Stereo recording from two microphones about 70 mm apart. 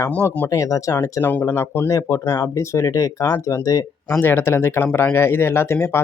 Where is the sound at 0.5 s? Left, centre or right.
Left.